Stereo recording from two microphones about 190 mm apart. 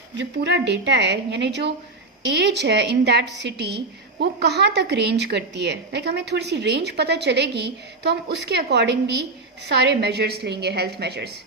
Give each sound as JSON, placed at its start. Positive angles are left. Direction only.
{"t": 0.2, "sound": "a woman's voice", "side_deg": -65}